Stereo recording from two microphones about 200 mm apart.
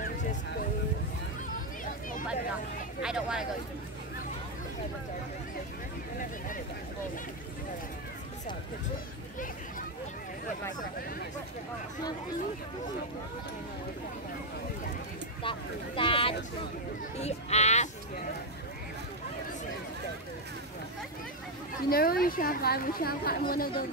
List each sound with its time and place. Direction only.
3.0 s speech: 5° right (ahead or behind)
15.4 s speech: 25° left (ahead or behind)
21.8 s a woman's voice: 50° left (ahead or behind)